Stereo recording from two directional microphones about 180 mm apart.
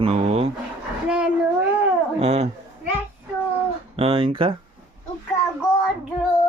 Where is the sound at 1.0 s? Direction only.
5° right (ahead or behind).